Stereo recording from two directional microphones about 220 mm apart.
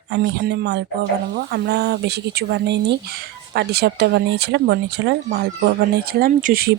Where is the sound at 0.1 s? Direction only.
50° right (ahead or behind).